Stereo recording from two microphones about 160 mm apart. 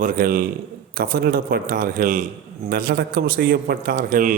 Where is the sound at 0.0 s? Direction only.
60° right (ahead or behind).